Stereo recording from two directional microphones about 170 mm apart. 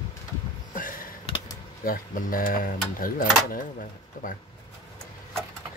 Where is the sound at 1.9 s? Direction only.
55° left (ahead or behind).